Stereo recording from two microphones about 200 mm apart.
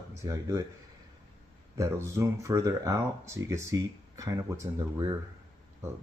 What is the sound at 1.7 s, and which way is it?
Speech, 15° right (ahead or behind).